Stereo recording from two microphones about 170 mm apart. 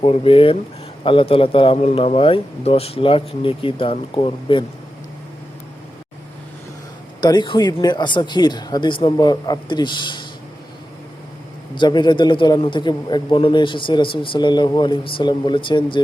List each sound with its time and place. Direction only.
0.0 s a man's voice: 35° left (ahead or behind)
7.2 s a man's voice: 25° left (ahead or behind)
11.7 s a man's voice: 25° left (ahead or behind)